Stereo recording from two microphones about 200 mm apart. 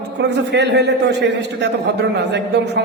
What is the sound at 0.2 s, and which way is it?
A man's voice, 60° right (ahead or behind).